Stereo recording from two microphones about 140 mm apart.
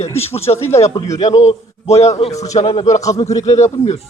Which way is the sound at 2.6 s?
40° left (ahead or behind).